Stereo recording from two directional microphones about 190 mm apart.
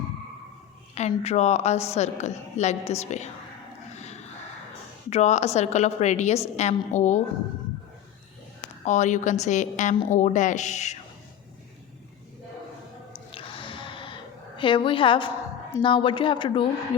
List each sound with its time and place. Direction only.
0.9 s a woman's voice: 35° left (ahead or behind)
5.0 s a woman's voice: 35° left (ahead or behind)
8.8 s a woman's voice: 40° left (ahead or behind)
13.3 s a sound: 25° left (ahead or behind)
15.8 s speech: 25° left (ahead or behind)